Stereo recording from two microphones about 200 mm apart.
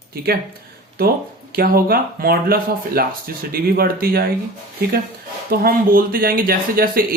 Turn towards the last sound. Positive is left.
turn(degrees=-45)  # may be behind; listen again after turning